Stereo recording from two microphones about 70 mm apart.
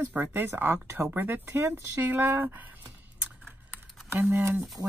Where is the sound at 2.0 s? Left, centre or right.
Right.